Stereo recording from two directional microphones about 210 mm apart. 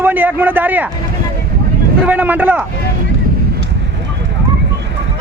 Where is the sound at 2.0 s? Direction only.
10° right (ahead or behind).